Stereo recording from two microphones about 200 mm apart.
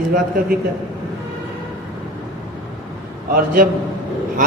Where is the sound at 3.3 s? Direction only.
45° right (ahead or behind).